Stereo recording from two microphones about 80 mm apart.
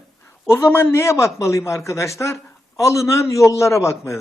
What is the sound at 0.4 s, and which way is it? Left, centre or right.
A man's voice, left.